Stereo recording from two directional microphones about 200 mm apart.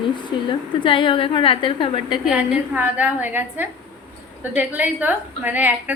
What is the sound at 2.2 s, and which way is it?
A woman's voice, 5° right (ahead or behind).